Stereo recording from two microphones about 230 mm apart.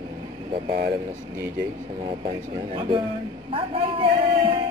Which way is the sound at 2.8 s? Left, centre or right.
Centre.